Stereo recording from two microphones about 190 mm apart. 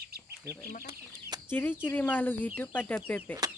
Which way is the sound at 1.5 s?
10° left (ahead or behind).